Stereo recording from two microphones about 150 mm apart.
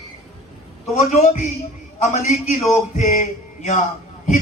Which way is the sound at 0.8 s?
50° left (ahead or behind).